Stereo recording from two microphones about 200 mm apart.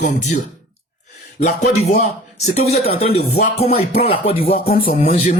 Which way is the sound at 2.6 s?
30° left (ahead or behind).